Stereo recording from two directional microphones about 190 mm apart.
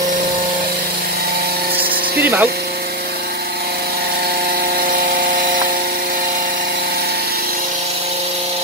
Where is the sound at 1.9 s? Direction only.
50° right (ahead or behind).